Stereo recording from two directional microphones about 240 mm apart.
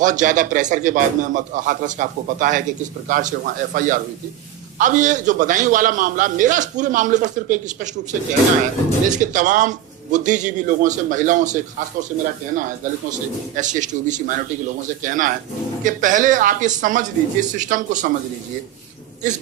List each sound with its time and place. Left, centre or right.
0.0 s a man's voice: right
9.0 s a man's voice: right